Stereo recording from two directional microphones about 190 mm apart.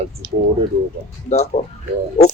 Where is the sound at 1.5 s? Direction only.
40° left (ahead or behind).